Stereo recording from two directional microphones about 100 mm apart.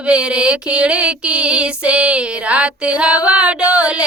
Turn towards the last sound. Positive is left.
turn(degrees=-15)  # may be behind; listen again after turning